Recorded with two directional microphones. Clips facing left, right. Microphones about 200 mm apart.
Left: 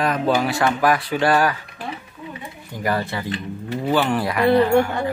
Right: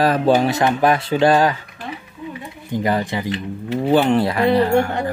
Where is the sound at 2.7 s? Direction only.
20° right (ahead or behind).